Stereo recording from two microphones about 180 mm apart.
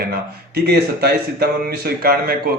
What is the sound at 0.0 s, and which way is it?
A man's voice, 60° right (ahead or behind).